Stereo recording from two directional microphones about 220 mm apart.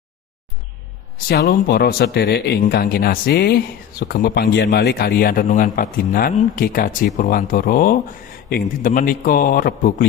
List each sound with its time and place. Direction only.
1.3 s speech: 45° left (ahead or behind)